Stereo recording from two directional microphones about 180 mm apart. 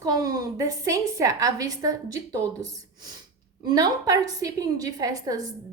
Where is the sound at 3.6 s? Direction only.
20° right (ahead or behind).